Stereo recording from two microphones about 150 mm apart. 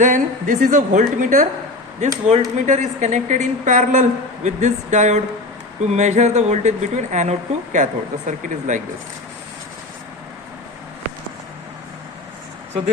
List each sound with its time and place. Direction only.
0.0 s a woman's voice: 55° right (ahead or behind)